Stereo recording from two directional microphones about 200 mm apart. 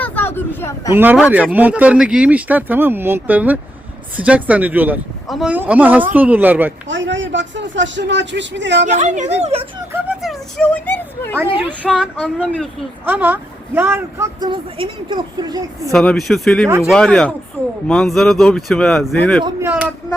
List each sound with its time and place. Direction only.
0.0 s speech: 10° left (ahead or behind)
0.9 s speech: 10° right (ahead or behind)
6.8 s speech: 65° right (ahead or behind)
8.9 s speech: 35° right (ahead or behind)
10.2 s a woman's voice: 5° left (ahead or behind); by 14.5 s 15° right (ahead or behind)
14.5 s a woman's voice: 25° right (ahead or behind)
15.9 s speech: centre (ahead or behind)
16.6 s speech: 10° right (ahead or behind)
16.9 s speech: 5° left (ahead or behind)
19.5 s speech: 10° right (ahead or behind)